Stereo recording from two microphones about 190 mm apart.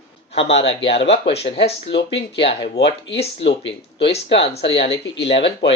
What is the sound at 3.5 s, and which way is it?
Speech, 30° left (ahead or behind).